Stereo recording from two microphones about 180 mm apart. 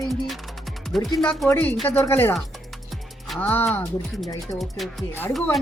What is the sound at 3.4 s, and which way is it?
Speech, 10° left (ahead or behind).